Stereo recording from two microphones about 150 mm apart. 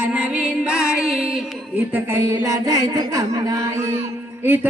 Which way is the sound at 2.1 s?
20° right (ahead or behind).